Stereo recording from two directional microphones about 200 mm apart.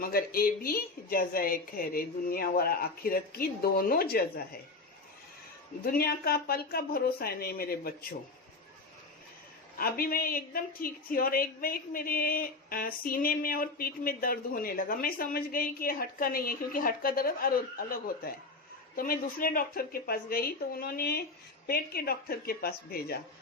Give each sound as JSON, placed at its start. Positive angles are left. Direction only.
{"t": 0.0, "sound": "a woman's voice", "side_deg": 50}
{"t": 5.8, "sound": "a woman's voice", "side_deg": 50}
{"t": 9.7, "sound": "a woman's voice", "side_deg": 45}